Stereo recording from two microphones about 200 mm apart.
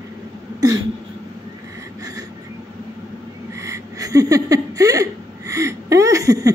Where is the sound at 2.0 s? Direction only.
20° right (ahead or behind).